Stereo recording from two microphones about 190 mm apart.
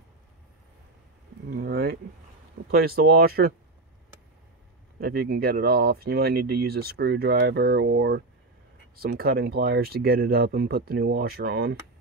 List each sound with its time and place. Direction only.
1.5 s a sound: 55° right (ahead or behind)
2.7 s speech: 50° right (ahead or behind)
5.0 s speech: 55° right (ahead or behind)
8.9 s speech: 55° right (ahead or behind)